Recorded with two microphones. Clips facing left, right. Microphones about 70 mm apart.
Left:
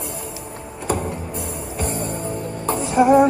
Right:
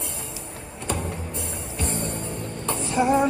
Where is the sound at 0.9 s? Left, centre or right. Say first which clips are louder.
Left 6 dB; centre.